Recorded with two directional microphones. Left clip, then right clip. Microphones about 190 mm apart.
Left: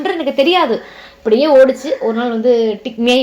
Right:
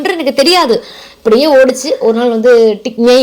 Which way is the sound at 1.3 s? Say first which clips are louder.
Right 2 dB; 40° right (ahead or behind).